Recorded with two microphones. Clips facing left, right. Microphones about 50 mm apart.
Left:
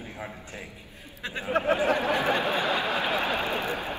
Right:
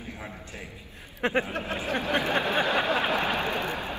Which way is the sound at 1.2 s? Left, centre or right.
Right.